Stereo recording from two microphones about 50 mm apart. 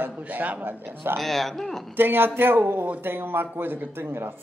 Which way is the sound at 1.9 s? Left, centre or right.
Right.